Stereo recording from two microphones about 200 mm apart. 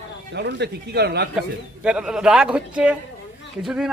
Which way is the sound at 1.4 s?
5° right (ahead or behind).